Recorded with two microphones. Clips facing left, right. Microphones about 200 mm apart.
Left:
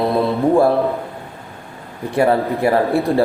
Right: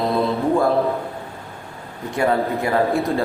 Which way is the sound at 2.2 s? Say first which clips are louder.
Left 4 dB; 30° left (ahead or behind).